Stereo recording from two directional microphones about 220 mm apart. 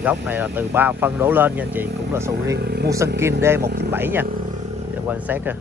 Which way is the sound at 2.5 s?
45° right (ahead or behind).